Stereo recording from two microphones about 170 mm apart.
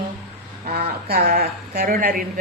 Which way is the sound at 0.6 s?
65° right (ahead or behind).